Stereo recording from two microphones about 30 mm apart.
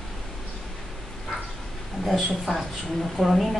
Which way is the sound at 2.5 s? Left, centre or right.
Centre.